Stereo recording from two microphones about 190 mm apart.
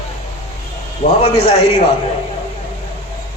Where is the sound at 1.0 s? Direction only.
35° left (ahead or behind).